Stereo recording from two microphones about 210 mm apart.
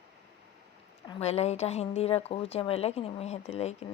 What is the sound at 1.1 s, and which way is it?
A woman's voice, 30° left (ahead or behind).